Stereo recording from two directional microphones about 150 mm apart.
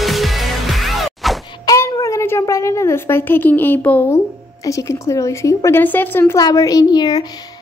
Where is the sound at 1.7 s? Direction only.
20° left (ahead or behind).